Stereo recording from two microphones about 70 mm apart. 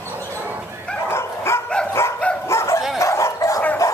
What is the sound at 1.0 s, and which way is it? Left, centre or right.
Dog, left.